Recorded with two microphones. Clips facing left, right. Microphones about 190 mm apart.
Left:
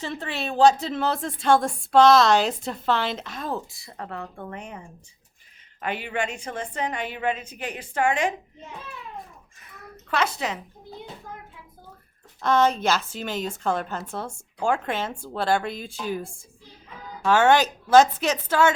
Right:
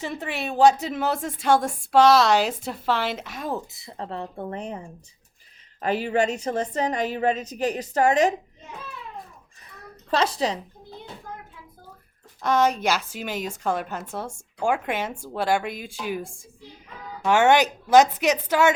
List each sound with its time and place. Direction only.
0.0 s a woman's voice: 10° right (ahead or behind); by 8.3 s 35° right (ahead or behind)
10.1 s a woman's voice: 30° right (ahead or behind)
12.4 s a woman's voice: 10° right (ahead or behind)